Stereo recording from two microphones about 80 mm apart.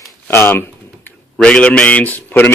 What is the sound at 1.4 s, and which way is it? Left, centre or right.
A man's voice, centre.